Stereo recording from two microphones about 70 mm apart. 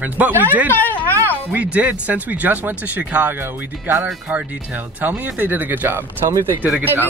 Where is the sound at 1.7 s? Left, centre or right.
Right.